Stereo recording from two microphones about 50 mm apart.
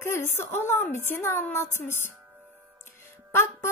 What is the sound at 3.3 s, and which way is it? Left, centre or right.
Speech, left.